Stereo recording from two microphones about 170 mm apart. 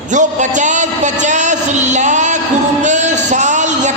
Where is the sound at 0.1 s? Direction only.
45° right (ahead or behind).